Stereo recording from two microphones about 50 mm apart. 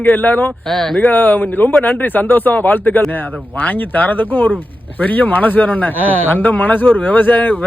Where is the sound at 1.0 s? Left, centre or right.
Left.